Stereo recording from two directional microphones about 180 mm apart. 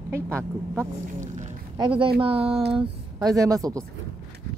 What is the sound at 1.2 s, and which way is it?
Speech, 40° right (ahead or behind).